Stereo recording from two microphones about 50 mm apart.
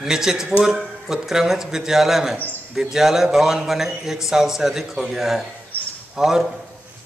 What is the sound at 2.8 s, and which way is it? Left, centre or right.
Speech, centre.